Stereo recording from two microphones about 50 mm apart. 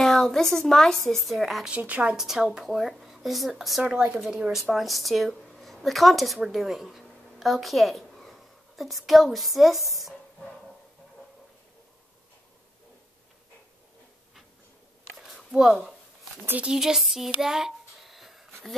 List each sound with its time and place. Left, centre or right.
0.0 s a woman's voice: centre
1.7 s speech: right
2.1 s a woman's voice: centre
3.8 s speech: centre
4.6 s a woman's voice: centre
15.1 s a sound: centre
16.7 s a sound: centre